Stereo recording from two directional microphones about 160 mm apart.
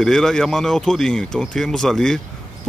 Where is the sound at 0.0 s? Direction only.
5° left (ahead or behind).